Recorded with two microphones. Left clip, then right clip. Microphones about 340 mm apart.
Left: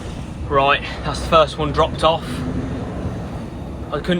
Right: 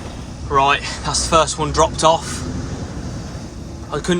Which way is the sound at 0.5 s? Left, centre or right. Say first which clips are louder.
Right 1 dB; centre.